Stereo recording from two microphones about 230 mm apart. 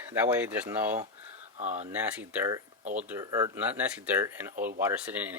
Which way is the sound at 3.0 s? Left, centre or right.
Centre.